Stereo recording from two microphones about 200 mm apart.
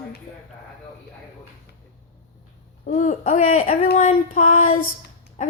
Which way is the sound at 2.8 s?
40° left (ahead or behind).